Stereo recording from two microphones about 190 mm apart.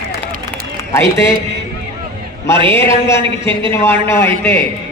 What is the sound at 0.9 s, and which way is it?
Speech, 15° left (ahead or behind).